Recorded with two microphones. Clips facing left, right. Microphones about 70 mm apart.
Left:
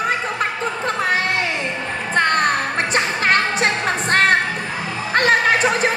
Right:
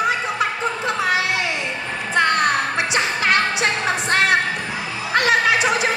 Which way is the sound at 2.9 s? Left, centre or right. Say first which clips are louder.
Left 2 dB; left.